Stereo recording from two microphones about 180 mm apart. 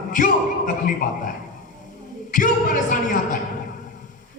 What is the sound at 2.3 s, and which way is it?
Speech, 50° left (ahead or behind).